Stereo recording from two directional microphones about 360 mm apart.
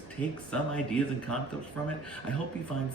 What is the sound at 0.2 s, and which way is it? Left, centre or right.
Speech, centre.